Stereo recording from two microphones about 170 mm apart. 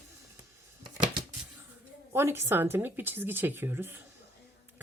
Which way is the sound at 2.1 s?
15° right (ahead or behind).